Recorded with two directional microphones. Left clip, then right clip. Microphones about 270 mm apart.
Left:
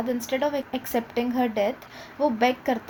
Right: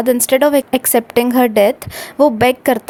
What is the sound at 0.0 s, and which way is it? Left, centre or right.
A woman's voice, right.